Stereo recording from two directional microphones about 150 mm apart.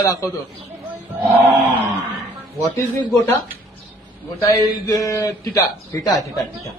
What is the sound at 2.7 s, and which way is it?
Speech, 20° left (ahead or behind).